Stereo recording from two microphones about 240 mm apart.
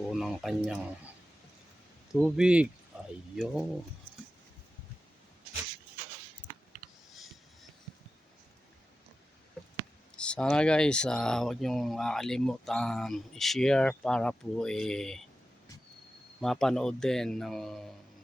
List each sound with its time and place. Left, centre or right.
0.1 s speech: centre
2.1 s speech: centre
2.9 s a sound: centre
3.3 s speech: centre
10.2 s speech: centre
16.4 s speech: centre